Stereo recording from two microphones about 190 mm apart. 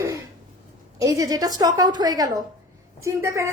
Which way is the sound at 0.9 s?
20° right (ahead or behind).